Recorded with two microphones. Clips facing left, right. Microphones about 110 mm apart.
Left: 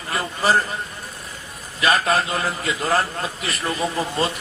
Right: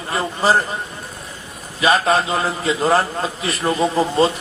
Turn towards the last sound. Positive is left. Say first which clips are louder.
# right 7 dB
turn(degrees=-30)  # may be behind; listen again after turning